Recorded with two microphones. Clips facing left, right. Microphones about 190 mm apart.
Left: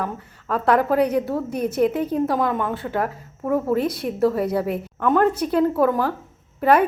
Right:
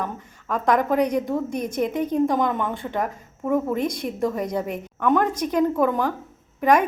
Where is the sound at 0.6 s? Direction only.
15° right (ahead or behind).